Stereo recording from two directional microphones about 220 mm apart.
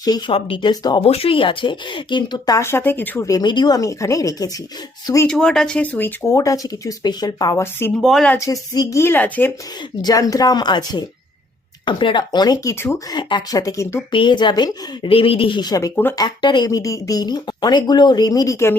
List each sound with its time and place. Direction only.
0.0 s speech: 20° left (ahead or behind)
5.3 s speech: 5° left (ahead or behind)